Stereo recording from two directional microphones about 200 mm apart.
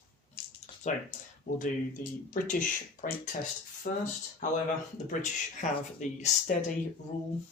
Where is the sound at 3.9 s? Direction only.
40° left (ahead or behind).